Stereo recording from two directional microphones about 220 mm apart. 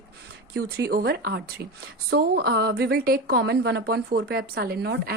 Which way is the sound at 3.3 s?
55° right (ahead or behind).